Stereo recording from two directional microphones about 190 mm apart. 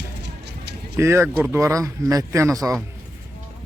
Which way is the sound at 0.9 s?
15° right (ahead or behind).